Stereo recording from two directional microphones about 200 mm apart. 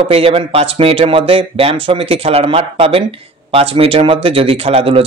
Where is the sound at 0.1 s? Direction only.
30° right (ahead or behind).